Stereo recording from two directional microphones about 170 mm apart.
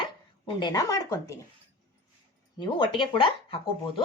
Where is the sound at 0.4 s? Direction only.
25° left (ahead or behind).